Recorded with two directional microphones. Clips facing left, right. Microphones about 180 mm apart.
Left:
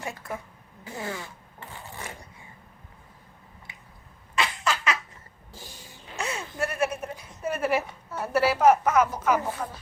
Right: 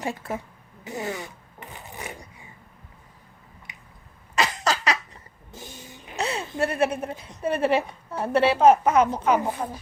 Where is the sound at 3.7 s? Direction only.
20° right (ahead or behind).